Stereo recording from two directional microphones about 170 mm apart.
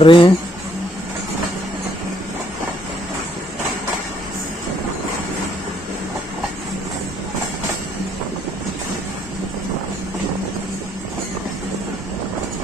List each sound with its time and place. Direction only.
0.0 s speech: 30° left (ahead or behind)